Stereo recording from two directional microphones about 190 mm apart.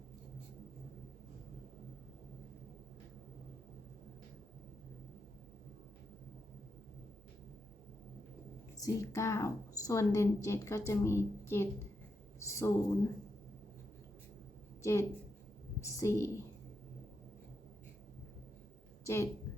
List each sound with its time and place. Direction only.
8.8 s a woman's voice: 15° left (ahead or behind)
14.8 s a woman's voice: 15° left (ahead or behind)
19.0 s a woman's voice: 15° left (ahead or behind)